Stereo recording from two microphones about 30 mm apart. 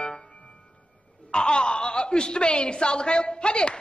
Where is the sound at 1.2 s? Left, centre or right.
Left.